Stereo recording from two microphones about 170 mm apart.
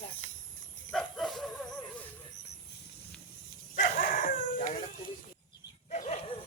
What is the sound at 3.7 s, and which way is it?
Dog, 55° left (ahead or behind).